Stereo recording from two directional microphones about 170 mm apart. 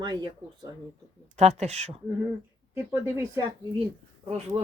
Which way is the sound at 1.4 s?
40° right (ahead or behind).